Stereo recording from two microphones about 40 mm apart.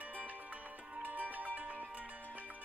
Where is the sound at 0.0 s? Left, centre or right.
Right.